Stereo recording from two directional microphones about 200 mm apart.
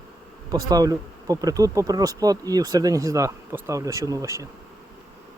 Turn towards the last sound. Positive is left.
turn(degrees=-15)  # may be behind; listen again after turning